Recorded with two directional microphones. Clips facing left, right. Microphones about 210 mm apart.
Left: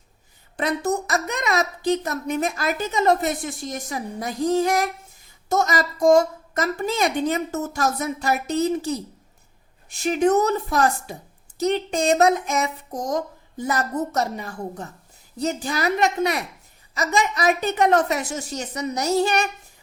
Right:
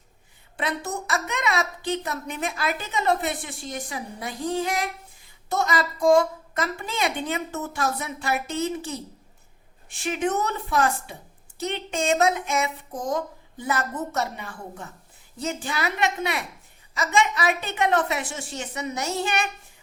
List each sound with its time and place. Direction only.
0.5 s a woman's voice: 40° left (ahead or behind)